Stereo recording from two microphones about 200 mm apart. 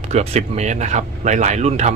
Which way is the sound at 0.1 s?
35° right (ahead or behind).